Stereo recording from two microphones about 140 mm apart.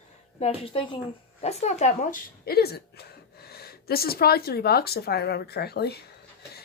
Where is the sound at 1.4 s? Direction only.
50° left (ahead or behind); by 5.5 s 90° left.